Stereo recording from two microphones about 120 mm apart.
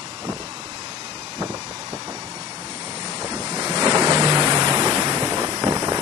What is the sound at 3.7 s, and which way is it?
Waves, 35° right (ahead or behind).